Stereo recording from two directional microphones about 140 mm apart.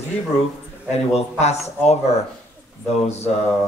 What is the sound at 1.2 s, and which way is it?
Speech, 50° left (ahead or behind).